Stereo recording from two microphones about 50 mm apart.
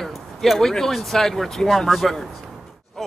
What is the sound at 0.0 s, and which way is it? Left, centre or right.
Speech, centre.